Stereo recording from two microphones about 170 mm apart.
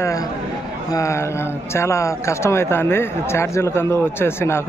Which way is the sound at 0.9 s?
20° left (ahead or behind).